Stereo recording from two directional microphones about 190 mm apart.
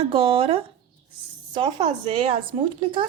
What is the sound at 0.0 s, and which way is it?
A woman's voice, 30° right (ahead or behind).